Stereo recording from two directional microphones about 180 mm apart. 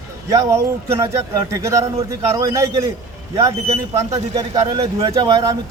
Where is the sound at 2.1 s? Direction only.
20° right (ahead or behind).